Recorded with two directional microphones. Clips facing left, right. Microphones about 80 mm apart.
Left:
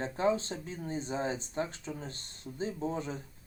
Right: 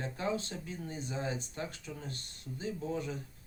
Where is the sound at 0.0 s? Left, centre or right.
Left.